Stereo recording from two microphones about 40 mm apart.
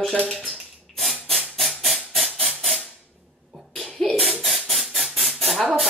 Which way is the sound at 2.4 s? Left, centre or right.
Centre.